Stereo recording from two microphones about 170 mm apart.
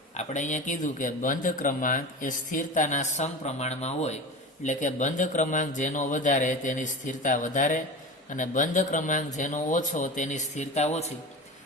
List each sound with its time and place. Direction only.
0.2 s speech: 45° left (ahead or behind)